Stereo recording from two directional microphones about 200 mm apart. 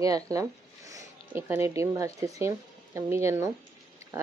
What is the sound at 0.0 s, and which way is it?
Speech, 15° right (ahead or behind).